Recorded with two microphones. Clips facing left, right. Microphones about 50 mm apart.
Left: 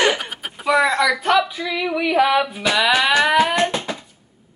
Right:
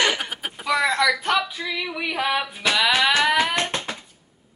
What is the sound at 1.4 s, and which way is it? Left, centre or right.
Female singing, centre.